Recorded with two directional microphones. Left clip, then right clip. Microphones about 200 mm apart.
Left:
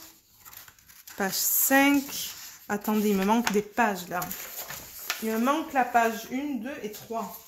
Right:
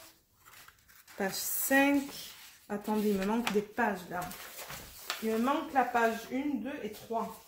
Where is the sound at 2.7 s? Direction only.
45° left (ahead or behind).